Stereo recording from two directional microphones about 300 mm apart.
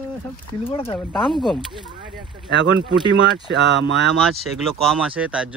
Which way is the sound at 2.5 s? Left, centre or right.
Right.